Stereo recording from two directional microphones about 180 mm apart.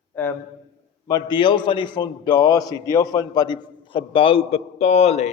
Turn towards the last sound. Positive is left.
turn(degrees=35)  # may be behind; listen again after turning